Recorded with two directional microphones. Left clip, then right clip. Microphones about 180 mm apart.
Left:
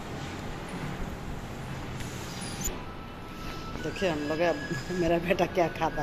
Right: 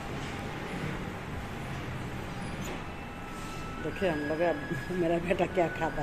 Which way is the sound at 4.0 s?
5° left (ahead or behind).